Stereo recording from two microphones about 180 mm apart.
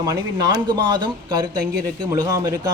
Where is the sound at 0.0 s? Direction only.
20° right (ahead or behind).